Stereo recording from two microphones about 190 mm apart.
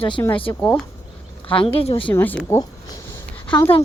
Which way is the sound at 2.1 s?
10° left (ahead or behind).